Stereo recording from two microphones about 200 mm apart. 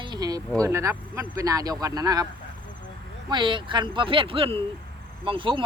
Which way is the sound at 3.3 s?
25° right (ahead or behind).